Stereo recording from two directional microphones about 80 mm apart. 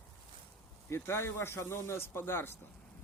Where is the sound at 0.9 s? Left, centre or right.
Left.